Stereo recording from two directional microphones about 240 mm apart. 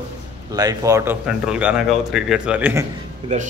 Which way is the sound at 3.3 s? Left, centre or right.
Right.